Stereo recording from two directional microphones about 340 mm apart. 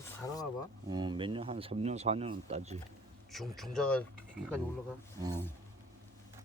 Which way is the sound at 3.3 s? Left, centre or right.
Centre.